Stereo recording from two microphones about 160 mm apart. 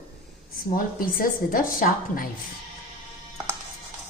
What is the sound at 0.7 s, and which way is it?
A woman's voice, 60° left (ahead or behind).